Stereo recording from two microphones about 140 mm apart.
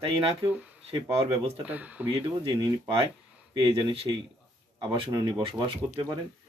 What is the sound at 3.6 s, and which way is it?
Speech, 40° right (ahead or behind).